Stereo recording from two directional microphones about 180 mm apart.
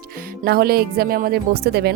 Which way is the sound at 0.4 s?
60° right (ahead or behind).